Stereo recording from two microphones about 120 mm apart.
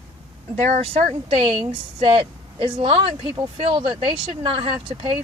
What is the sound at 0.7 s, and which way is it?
Speech, 55° right (ahead or behind).